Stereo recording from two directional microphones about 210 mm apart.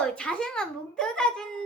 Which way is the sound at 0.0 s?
5° left (ahead or behind).